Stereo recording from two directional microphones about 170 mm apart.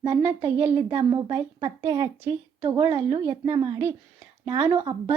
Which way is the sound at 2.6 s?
30° right (ahead or behind).